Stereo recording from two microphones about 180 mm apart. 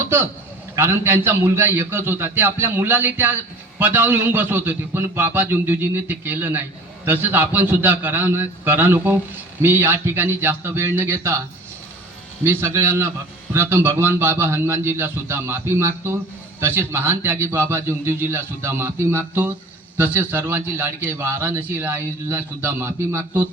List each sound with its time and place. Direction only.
0.0 s a sound: 15° right (ahead or behind)
0.8 s a man's voice: 15° right (ahead or behind)
12.4 s a man's voice: 15° right (ahead or behind)